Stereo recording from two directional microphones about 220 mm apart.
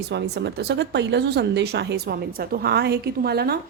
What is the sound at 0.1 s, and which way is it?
Speech, 50° right (ahead or behind).